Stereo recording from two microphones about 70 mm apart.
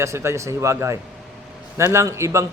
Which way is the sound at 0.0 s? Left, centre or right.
Right.